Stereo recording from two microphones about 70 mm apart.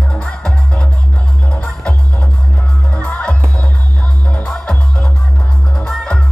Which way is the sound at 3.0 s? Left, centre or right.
Centre.